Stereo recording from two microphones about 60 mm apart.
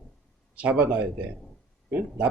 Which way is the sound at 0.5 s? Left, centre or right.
Right.